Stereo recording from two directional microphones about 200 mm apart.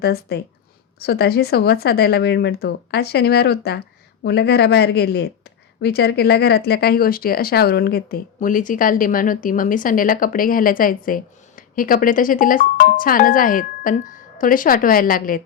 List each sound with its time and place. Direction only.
0.0 s speech: 55° left (ahead or behind)